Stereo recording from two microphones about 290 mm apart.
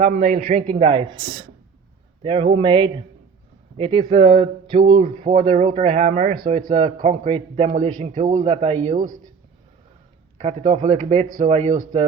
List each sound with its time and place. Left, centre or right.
0.2 s a man's voice: right
0.6 s speech: centre
10.3 s speech: right